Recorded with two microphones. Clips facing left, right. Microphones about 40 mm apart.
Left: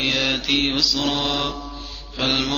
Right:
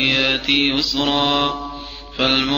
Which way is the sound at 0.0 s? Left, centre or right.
Right.